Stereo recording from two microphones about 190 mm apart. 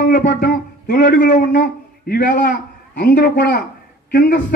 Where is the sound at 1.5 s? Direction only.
50° left (ahead or behind).